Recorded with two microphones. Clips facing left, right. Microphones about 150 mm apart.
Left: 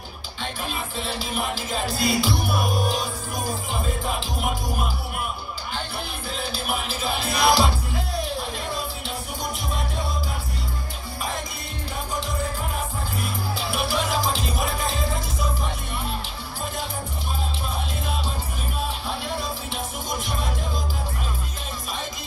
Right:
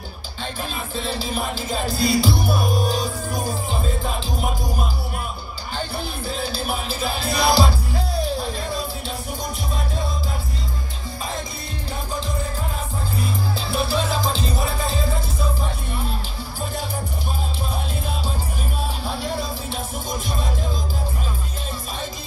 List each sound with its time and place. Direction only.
2.0 s music: 35° right (ahead or behind)
6.2 s music: 35° right (ahead or behind)
13.2 s music: 30° right (ahead or behind)
19.0 s music: 40° right (ahead or behind)